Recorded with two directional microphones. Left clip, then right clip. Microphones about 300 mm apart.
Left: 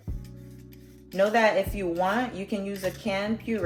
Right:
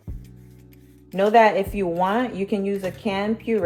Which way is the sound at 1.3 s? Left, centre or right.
Centre.